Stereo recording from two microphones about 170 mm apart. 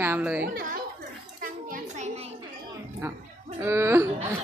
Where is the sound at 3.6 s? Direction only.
15° right (ahead or behind).